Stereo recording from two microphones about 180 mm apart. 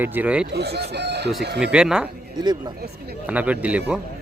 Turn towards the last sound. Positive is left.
turn(degrees=-10)  # may be behind; listen again after turning